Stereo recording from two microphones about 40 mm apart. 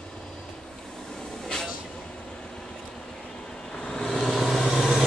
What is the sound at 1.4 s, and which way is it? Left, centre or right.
Vehicle, centre.